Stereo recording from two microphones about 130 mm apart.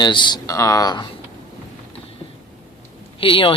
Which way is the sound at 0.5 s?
25° left (ahead or behind).